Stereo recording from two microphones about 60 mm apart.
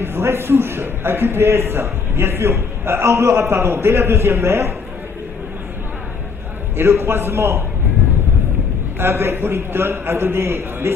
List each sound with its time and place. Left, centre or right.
0.0 s a man's voice: right
6.8 s a man's voice: right
9.0 s a man's voice: right